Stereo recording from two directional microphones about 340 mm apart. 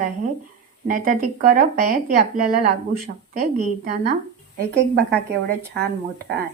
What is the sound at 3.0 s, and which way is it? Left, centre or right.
Speech, right.